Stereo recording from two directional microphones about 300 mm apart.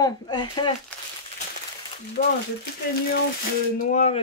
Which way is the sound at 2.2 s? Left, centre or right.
Left.